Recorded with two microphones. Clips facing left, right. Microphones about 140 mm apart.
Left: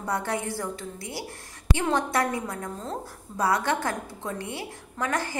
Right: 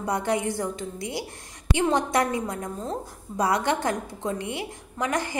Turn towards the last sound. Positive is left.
turn(degrees=-15)  # may be behind; listen again after turning